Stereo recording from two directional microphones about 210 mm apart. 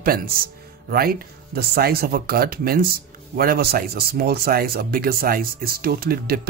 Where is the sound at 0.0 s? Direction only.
45° right (ahead or behind).